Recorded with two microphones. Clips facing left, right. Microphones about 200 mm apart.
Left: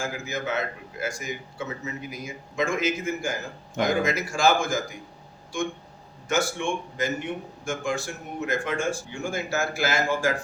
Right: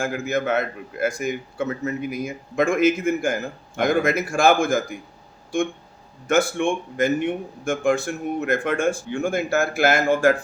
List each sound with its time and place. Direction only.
0.0 s a man's voice: 55° right (ahead or behind)